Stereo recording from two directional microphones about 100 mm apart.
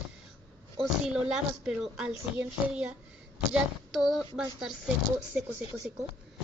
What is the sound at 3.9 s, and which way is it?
Speech, centre (ahead or behind).